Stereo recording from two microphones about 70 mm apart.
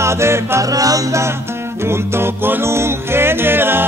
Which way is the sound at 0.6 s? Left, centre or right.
Right.